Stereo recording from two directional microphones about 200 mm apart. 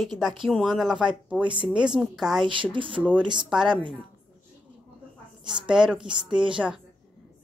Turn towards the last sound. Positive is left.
turn(degrees=-5)  # may be behind; listen again after turning